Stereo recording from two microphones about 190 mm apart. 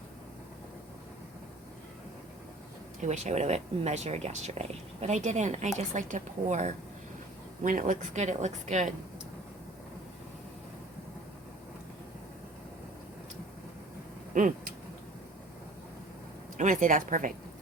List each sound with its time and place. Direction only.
3.0 s speech: 35° right (ahead or behind)
16.6 s speech: 40° right (ahead or behind)